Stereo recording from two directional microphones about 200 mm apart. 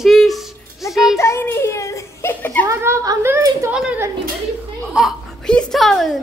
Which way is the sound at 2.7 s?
15° right (ahead or behind).